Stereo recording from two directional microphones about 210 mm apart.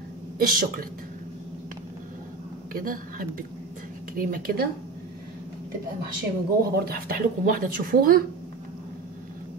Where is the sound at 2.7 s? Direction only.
45° right (ahead or behind).